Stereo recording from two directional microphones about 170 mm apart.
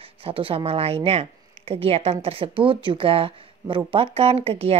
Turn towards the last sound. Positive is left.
turn(degrees=-35)  # may be behind; listen again after turning